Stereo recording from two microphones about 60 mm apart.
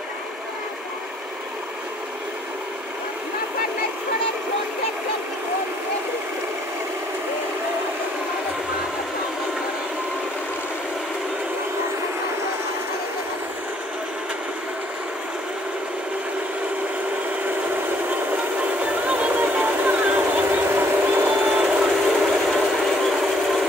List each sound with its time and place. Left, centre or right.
19.0 s vehicle: right
21.5 s vehicle: centre
22.5 s vehicle: centre